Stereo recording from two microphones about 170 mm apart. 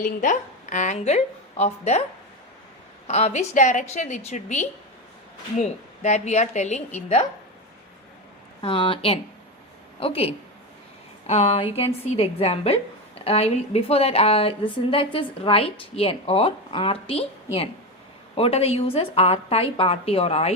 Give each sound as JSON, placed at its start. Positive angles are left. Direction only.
{"t": 0.0, "sound": "a woman's voice", "side_deg": 50}
{"t": 3.1, "sound": "a woman's voice", "side_deg": 40}
{"t": 8.6, "sound": "a woman's voice", "side_deg": 30}